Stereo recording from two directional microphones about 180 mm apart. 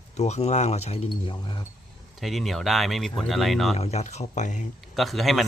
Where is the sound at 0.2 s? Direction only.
40° left (ahead or behind).